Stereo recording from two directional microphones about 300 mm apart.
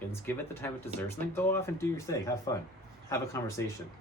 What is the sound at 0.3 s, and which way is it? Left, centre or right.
Speech, centre.